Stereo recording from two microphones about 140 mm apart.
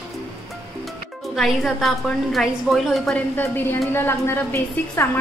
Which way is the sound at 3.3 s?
15° left (ahead or behind).